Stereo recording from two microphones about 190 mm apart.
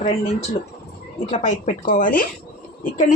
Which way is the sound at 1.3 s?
40° left (ahead or behind).